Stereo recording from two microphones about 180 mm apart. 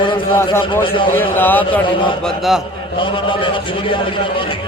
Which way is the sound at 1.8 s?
25° left (ahead or behind).